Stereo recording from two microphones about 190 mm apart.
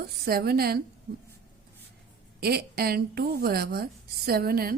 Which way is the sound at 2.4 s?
55° right (ahead or behind).